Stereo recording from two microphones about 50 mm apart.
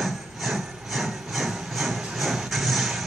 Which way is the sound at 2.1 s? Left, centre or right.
Centre.